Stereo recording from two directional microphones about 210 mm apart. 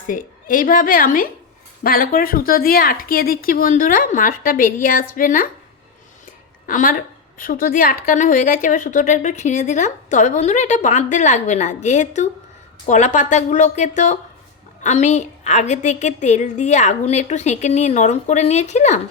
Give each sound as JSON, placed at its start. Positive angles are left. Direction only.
{"t": 0.1, "sound": "a woman's voice", "side_deg": 40}
{"t": 6.7, "sound": "a woman's voice", "side_deg": 40}